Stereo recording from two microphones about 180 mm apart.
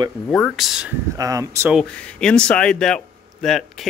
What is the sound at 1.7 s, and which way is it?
Speech, 5° left (ahead or behind).